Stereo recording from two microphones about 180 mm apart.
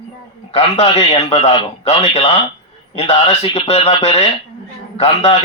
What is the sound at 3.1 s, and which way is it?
Speech, 30° left (ahead or behind).